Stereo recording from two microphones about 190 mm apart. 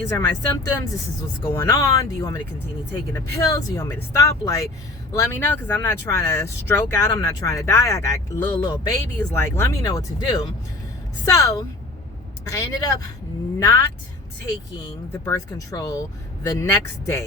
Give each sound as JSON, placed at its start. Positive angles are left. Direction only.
{"t": 0.1, "sound": "speech", "side_deg": 20}
{"t": 15.1, "sound": "speech", "side_deg": 15}